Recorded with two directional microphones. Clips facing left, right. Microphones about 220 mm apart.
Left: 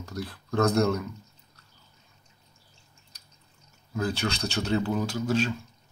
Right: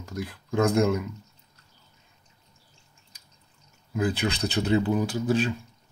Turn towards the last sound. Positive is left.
turn(degrees=-15)  # may be behind; listen again after turning